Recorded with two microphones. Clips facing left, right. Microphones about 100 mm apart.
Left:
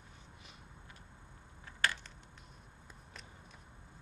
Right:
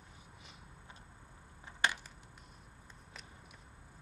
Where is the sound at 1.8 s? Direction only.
15° right (ahead or behind).